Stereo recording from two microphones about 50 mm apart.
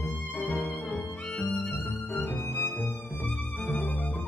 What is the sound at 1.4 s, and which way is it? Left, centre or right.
Music, left.